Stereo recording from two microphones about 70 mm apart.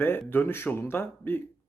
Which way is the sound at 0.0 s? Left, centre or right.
Left.